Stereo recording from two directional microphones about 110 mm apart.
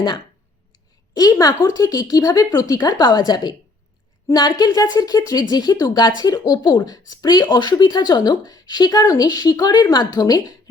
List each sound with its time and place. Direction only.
1.1 s speech: 35° left (ahead or behind)